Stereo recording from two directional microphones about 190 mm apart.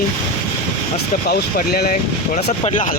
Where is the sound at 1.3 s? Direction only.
55° left (ahead or behind).